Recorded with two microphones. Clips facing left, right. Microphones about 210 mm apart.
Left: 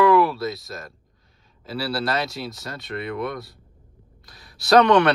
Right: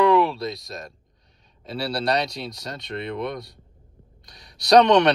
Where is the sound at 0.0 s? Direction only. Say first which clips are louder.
Left 1 dB; 25° right (ahead or behind).